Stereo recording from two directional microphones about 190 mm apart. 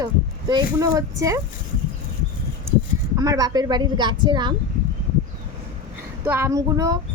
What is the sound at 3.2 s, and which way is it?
Speech, 20° right (ahead or behind).